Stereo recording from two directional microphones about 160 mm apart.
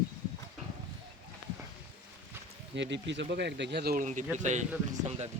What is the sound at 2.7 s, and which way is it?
Speech, 90° right.